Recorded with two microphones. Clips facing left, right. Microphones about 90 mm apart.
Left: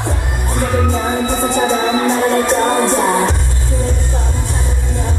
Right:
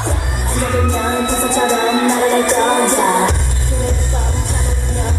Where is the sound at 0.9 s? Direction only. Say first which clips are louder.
Even; 20° right (ahead or behind).